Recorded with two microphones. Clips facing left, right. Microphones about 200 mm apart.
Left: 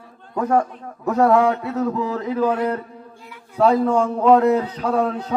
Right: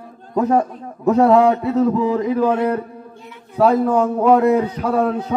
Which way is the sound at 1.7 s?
15° right (ahead or behind).